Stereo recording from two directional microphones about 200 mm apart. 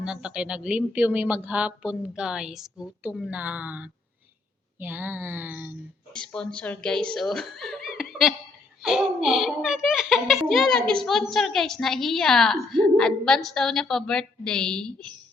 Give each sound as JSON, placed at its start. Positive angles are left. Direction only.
{"t": 0.0, "sound": "a child's voice", "side_deg": -5}
{"t": 6.1, "sound": "a child's voice", "side_deg": 5}